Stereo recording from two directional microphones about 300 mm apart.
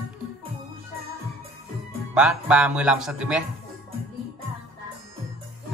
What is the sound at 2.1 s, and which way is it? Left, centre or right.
A man's voice, centre.